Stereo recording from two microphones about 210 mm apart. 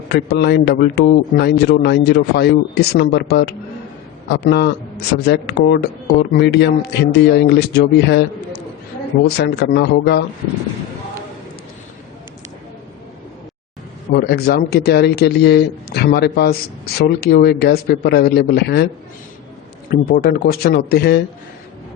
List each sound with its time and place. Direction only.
0.1 s a man's voice: 50° left (ahead or behind)
14.1 s a man's voice: 50° left (ahead or behind)
19.9 s a man's voice: 45° left (ahead or behind)